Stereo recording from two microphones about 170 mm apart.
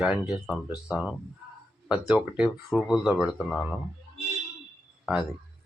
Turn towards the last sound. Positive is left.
turn(degrees=-5)  # may be behind; listen again after turning